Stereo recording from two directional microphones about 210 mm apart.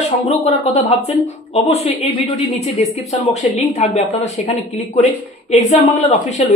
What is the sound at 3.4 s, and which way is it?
Speech, 30° left (ahead or behind).